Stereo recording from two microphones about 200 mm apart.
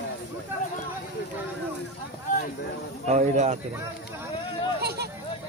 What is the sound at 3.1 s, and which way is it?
Speech, 35° right (ahead or behind).